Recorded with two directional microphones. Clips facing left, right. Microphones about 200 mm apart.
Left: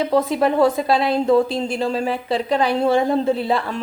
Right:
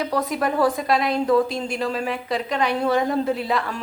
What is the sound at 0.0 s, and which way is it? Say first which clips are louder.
Speech: left 5 dB; 25° left (ahead or behind).